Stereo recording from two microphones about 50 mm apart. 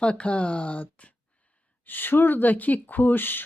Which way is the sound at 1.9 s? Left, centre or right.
Left.